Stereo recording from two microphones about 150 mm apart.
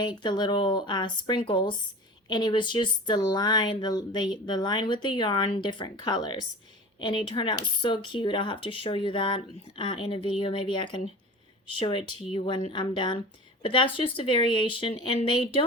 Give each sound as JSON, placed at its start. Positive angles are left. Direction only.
{"t": 0.0, "sound": "a woman's voice", "side_deg": 30}